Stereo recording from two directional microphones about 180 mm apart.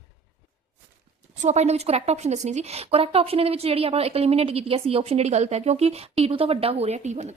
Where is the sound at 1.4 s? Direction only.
40° right (ahead or behind).